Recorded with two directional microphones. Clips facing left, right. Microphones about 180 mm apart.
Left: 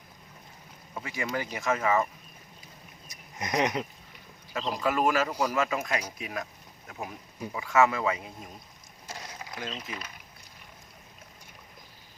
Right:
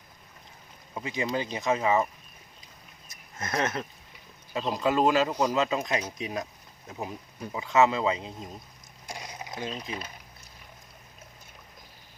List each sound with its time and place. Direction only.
0.9 s speech: 20° right (ahead or behind)
3.1 s speech: 15° left (ahead or behind)
4.7 s speech: 20° right (ahead or behind)
9.0 s a sound: 15° right (ahead or behind)